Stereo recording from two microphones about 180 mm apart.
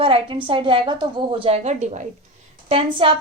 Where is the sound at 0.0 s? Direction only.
30° right (ahead or behind).